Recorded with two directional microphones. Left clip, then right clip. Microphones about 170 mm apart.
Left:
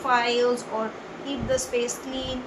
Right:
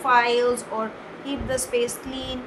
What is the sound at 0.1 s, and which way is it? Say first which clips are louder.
A woman's voice: right 3 dB; 40° right (ahead or behind).